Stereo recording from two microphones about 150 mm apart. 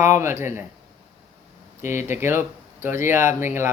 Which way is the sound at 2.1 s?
15° right (ahead or behind).